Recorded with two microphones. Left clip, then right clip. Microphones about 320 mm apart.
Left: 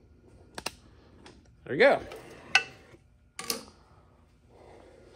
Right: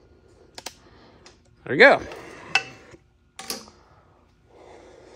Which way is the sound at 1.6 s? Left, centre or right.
Right.